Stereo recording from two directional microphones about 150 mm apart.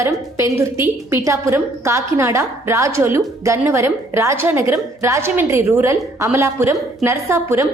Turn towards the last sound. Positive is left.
turn(degrees=-15)  # may be behind; listen again after turning